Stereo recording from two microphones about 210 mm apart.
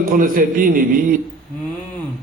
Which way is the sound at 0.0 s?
40° right (ahead or behind).